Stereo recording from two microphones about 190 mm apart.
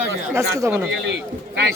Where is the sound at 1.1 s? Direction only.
60° right (ahead or behind).